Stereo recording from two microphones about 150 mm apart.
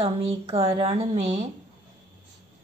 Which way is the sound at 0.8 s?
40° right (ahead or behind).